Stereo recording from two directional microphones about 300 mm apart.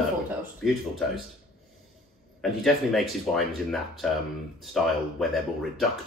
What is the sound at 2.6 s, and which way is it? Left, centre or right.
Speech, centre.